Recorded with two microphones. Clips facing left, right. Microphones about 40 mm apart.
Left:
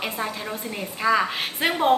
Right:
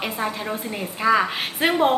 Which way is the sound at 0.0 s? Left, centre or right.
Centre.